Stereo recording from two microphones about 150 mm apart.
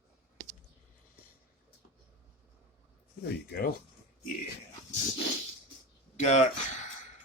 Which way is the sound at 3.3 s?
90° left.